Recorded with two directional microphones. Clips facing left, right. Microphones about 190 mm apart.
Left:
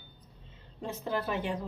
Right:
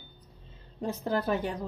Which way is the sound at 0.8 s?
40° right (ahead or behind).